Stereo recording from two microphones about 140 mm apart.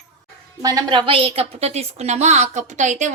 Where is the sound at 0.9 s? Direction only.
40° right (ahead or behind).